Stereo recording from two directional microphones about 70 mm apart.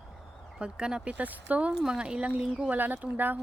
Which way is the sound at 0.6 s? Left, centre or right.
Centre.